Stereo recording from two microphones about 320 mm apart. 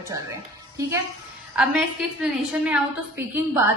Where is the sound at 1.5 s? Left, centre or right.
Centre.